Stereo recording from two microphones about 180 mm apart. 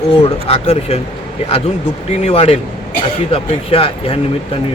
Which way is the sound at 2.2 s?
35° left (ahead or behind).